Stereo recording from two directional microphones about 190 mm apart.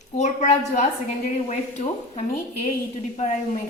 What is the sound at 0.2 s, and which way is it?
A woman's voice, 35° left (ahead or behind).